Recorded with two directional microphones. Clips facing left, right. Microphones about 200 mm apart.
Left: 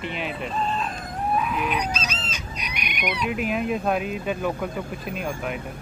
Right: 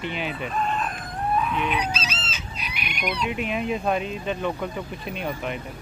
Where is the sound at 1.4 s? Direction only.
5° left (ahead or behind).